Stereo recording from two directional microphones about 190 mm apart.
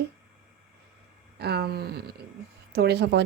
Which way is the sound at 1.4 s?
55° right (ahead or behind).